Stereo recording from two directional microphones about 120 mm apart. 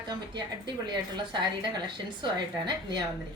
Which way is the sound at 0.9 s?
40° right (ahead or behind).